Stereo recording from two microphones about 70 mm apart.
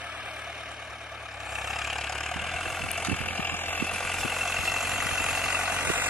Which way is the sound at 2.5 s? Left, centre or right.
Centre.